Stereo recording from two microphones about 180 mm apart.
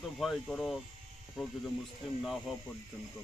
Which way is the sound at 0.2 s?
Centre (ahead or behind).